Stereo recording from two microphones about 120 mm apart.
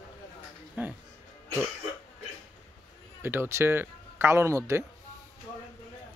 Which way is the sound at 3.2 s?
20° right (ahead or behind).